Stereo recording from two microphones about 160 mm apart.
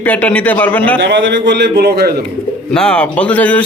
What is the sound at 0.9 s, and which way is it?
A man's voice, 90° right.